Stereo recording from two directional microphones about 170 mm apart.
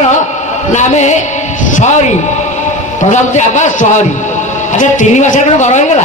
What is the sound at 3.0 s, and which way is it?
Speech, 45° left (ahead or behind).